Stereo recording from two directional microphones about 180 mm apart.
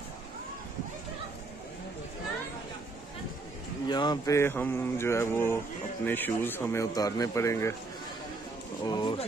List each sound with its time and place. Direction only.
3.8 s speech: 25° left (ahead or behind)
8.8 s speech: 25° left (ahead or behind)